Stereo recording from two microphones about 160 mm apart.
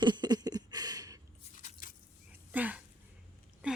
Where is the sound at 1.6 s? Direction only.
55° left (ahead or behind).